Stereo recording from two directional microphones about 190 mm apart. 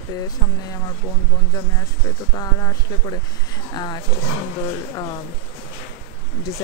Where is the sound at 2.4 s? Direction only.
15° left (ahead or behind).